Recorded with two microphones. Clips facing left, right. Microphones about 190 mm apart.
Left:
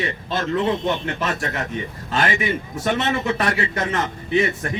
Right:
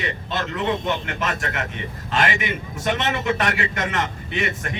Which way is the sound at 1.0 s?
35° left (ahead or behind).